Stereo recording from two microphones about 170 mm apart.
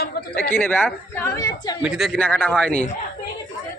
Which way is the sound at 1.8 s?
5° right (ahead or behind).